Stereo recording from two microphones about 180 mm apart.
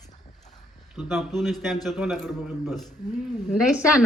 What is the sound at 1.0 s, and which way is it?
A man's voice, centre (ahead or behind).